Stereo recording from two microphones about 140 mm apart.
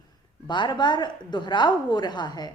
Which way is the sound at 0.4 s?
35° left (ahead or behind).